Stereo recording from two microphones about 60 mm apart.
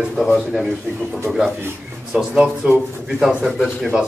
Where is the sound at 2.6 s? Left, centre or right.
Centre.